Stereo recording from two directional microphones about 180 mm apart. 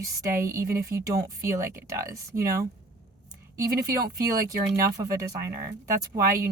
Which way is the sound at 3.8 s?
20° right (ahead or behind).